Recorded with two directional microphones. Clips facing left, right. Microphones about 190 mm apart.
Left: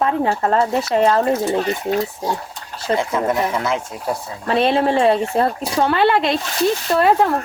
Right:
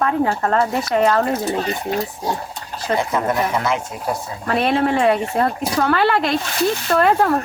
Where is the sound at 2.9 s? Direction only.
25° left (ahead or behind).